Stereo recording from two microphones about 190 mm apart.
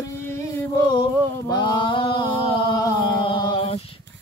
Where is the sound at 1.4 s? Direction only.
25° left (ahead or behind).